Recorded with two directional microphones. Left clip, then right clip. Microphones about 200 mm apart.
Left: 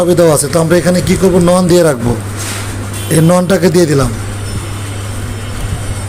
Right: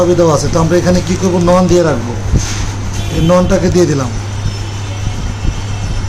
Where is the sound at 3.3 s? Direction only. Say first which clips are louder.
Right 1 dB; 20° left (ahead or behind).